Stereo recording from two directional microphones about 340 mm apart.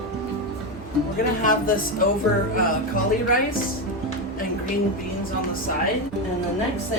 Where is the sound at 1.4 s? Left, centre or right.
Left.